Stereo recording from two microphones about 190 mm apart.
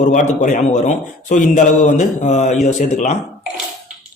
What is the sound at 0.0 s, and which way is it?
A man's voice, 40° left (ahead or behind).